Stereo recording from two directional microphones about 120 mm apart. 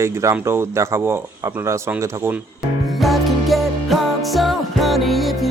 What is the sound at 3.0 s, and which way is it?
Music, centre (ahead or behind).